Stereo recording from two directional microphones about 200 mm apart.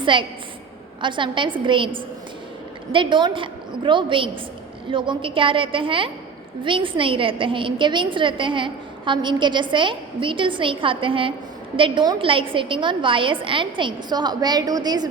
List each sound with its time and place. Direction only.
0.0 s a woman's voice: 25° right (ahead or behind)